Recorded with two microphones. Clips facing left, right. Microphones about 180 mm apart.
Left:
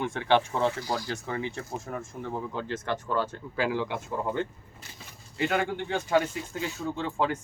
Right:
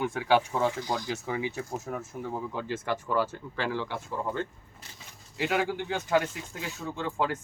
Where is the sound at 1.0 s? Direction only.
10° right (ahead or behind).